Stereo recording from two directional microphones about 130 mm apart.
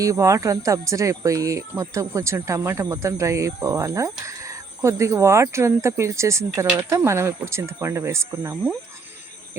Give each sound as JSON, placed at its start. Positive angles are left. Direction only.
{"t": 0.0, "sound": "speech", "side_deg": -25}